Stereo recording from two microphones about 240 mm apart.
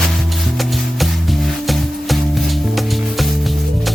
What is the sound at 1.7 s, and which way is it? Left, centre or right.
Music, centre.